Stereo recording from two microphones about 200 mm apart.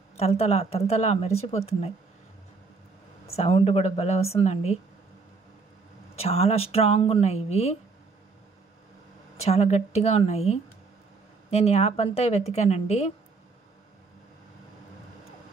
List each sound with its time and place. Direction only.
0.2 s a woman's voice: 30° left (ahead or behind)
3.3 s a woman's voice: 30° left (ahead or behind)
6.1 s a woman's voice: 30° left (ahead or behind)
9.4 s a woman's voice: 30° left (ahead or behind)